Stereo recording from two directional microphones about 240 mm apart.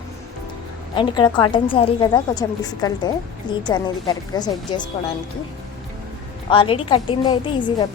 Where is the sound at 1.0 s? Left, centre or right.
Centre.